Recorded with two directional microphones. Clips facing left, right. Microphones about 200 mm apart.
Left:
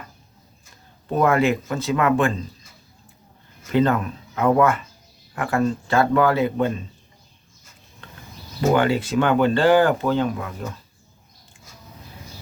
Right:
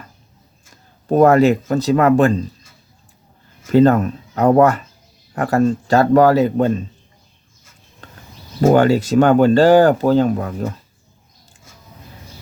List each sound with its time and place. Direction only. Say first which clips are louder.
1.0 s speech: right 7 dB; 40° right (ahead or behind)
3.7 s speech: right 7 dB; 40° right (ahead or behind)
8.6 s speech: right 6 dB; 45° right (ahead or behind)